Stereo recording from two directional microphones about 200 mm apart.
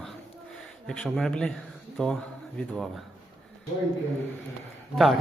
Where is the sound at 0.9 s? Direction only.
Centre (ahead or behind).